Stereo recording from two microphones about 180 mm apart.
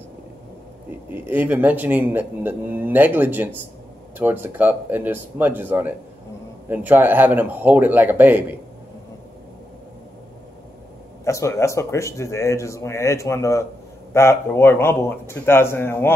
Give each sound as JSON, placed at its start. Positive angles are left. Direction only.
{"t": 1.1, "sound": "speech", "side_deg": -10}
{"t": 11.2, "sound": "speech", "side_deg": 15}